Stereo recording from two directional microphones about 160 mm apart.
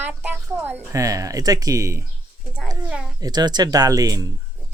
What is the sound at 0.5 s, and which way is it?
A child's voice, 15° right (ahead or behind).